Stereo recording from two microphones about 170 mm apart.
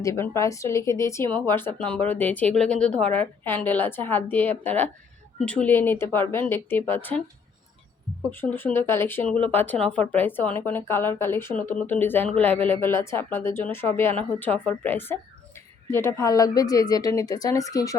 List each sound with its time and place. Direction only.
0.0 s speech: 15° left (ahead or behind)
8.3 s speech: 10° left (ahead or behind)